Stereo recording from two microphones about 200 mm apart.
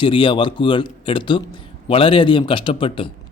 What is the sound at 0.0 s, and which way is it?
A man's voice, 25° left (ahead or behind).